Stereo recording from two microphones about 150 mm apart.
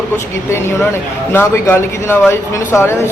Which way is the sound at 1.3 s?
15° left (ahead or behind).